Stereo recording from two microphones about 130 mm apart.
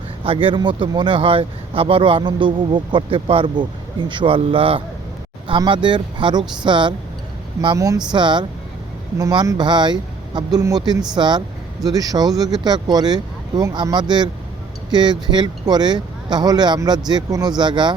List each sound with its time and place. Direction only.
0.3 s speech: 40° right (ahead or behind)